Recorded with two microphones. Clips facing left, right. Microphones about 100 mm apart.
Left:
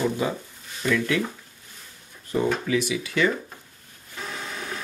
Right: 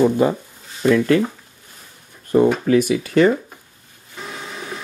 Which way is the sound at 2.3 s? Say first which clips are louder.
Right 9 dB; 45° right (ahead or behind).